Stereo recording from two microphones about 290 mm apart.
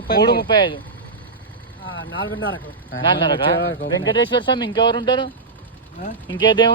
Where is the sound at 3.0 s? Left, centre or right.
Centre.